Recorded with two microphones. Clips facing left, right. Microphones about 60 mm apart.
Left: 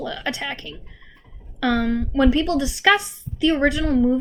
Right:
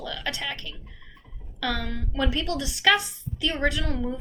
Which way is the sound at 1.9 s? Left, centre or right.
Left.